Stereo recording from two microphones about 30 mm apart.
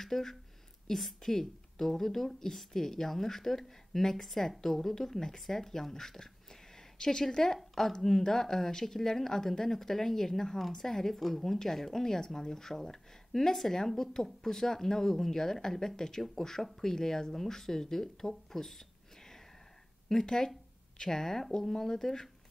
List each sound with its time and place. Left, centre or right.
0.0 s a woman's voice: centre
18.5 s a sound: centre
20.2 s a woman's voice: left